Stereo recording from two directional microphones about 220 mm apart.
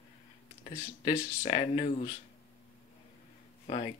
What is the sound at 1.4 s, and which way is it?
Speech, 25° left (ahead or behind).